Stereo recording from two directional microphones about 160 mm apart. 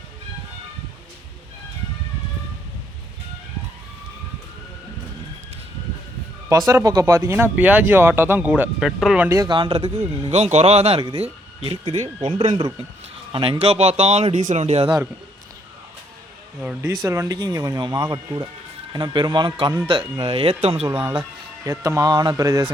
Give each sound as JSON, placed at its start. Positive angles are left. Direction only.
{"t": 6.7, "sound": "speech", "side_deg": -20}
{"t": 9.3, "sound": "speech", "side_deg": -25}
{"t": 16.6, "sound": "speech", "side_deg": -10}
{"t": 16.9, "sound": "speech", "side_deg": -20}
{"t": 20.8, "sound": "speech", "side_deg": -15}